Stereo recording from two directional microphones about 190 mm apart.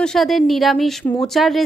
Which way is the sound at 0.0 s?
Centre (ahead or behind).